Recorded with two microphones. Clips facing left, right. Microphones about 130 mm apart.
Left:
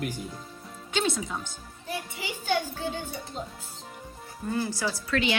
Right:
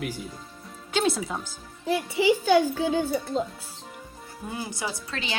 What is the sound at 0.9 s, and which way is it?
Speech, centre (ahead or behind).